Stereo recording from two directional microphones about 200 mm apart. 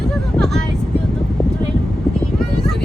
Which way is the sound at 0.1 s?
Centre (ahead or behind).